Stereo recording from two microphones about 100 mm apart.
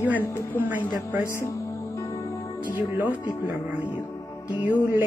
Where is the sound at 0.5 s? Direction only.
20° right (ahead or behind).